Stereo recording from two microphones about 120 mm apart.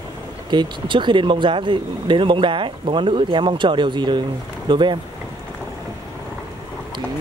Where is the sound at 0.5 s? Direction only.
40° right (ahead or behind).